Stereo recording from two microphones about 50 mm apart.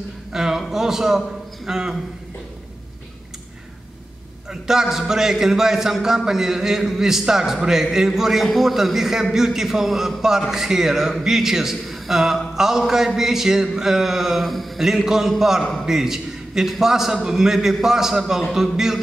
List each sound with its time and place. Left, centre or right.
0.3 s a man's voice: centre
4.5 s a man's voice: centre